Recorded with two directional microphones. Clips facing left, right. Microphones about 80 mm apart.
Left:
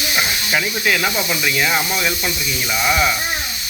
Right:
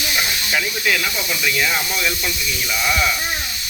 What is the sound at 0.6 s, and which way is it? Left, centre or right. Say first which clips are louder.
A man's voice: left 2 dB; left.